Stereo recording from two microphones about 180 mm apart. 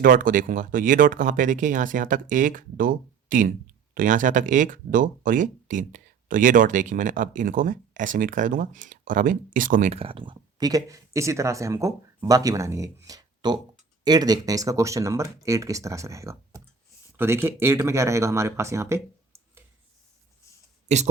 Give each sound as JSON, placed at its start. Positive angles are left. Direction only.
{"t": 0.0, "sound": "speech", "side_deg": -50}
{"t": 20.8, "sound": "speech", "side_deg": -40}